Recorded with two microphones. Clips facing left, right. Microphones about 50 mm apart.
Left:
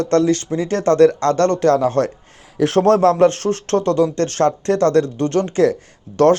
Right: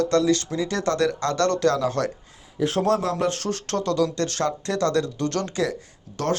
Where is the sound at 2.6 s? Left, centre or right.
Left.